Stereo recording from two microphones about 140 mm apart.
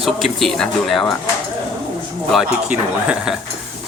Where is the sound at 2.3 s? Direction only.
5° right (ahead or behind).